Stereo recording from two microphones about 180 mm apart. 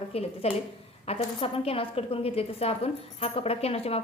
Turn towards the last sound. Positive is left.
turn(degrees=35)  # may be behind; listen again after turning